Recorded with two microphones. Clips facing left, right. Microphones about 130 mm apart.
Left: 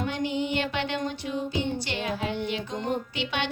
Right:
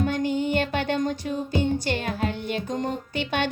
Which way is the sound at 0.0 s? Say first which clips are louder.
Right 4 dB; 45° right (ahead or behind).